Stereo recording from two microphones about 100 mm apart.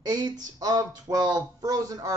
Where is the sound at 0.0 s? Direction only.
45° right (ahead or behind).